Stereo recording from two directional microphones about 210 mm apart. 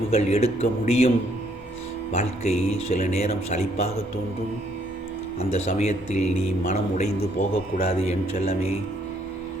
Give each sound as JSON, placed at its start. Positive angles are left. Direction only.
{"t": 0.1, "sound": "a man's voice", "side_deg": 30}
{"t": 2.1, "sound": "a man's voice", "side_deg": 30}
{"t": 5.4, "sound": "a man's voice", "side_deg": 30}